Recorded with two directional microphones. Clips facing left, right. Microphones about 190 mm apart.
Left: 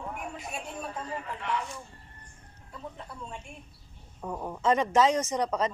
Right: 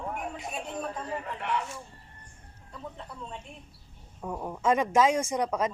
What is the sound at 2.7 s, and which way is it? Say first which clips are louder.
A woman's voice: even; 5° left (ahead or behind).